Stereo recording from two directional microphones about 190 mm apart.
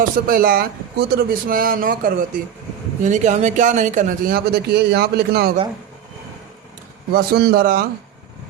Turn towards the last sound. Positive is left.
turn(degrees=-50)  # may be behind; listen again after turning